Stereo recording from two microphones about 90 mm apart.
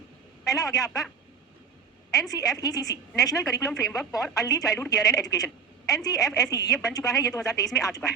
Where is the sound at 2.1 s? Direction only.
40° left (ahead or behind).